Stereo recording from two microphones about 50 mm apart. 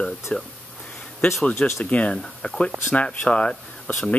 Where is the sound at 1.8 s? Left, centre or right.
Left.